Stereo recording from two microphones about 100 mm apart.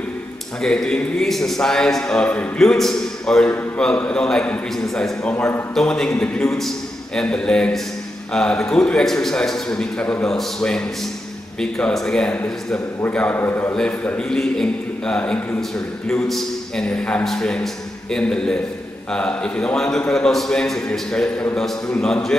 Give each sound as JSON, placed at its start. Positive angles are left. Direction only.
{"t": 0.6, "sound": "a man's voice", "side_deg": 5}
{"t": 5.3, "sound": "a man's voice", "side_deg": 20}
{"t": 5.8, "sound": "a man's voice", "side_deg": 5}
{"t": 13.7, "sound": "a man's voice", "side_deg": 10}